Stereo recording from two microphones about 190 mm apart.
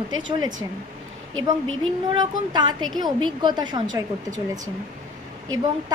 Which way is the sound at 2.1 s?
25° right (ahead or behind).